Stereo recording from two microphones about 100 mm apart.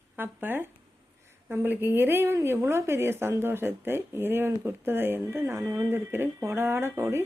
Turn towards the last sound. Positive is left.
turn(degrees=-30)  # may be behind; listen again after turning